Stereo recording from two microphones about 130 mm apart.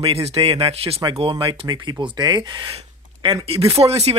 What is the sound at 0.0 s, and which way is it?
Speech, 50° right (ahead or behind).